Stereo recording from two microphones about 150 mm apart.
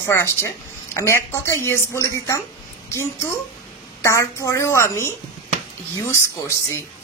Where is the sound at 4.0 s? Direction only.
20° left (ahead or behind).